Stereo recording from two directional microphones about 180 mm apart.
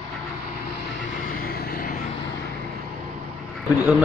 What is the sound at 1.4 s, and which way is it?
Vehicle, 55° left (ahead or behind).